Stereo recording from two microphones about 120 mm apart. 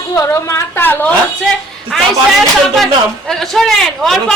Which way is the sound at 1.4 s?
5° left (ahead or behind).